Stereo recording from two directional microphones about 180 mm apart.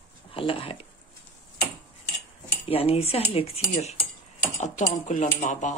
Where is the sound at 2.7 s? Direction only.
35° left (ahead or behind).